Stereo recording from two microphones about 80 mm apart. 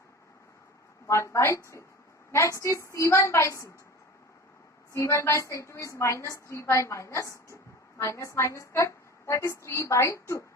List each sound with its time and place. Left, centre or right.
1.0 s a woman's voice: left
4.9 s a woman's voice: left